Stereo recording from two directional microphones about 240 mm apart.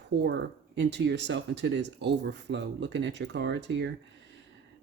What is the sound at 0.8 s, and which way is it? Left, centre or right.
Speech, right.